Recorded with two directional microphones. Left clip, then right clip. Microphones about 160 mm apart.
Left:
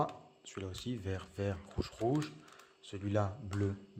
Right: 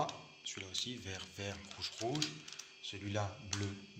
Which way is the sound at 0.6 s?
70° left (ahead or behind).